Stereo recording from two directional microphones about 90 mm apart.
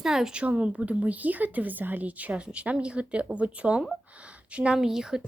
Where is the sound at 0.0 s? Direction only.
5° right (ahead or behind).